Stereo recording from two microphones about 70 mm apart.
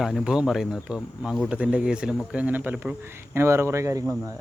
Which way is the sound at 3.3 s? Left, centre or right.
Right.